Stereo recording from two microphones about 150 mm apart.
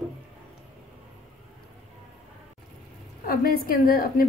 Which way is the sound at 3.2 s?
80° left.